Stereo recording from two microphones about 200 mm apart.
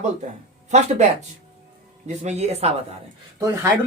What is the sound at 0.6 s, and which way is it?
Speech, 35° right (ahead or behind).